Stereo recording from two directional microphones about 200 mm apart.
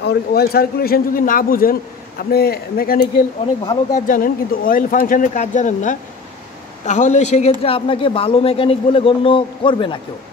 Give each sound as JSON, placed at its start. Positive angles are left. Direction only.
{"t": 0.0, "sound": "a man's voice", "side_deg": 50}